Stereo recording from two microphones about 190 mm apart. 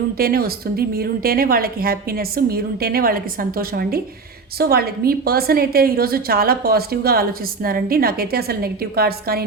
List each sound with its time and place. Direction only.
0.2 s a woman's voice: 50° right (ahead or behind)